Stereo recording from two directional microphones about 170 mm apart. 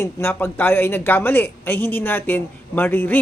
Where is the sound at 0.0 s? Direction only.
15° left (ahead or behind).